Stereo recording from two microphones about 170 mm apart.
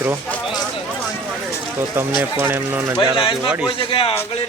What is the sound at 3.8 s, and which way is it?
Speech, 35° left (ahead or behind).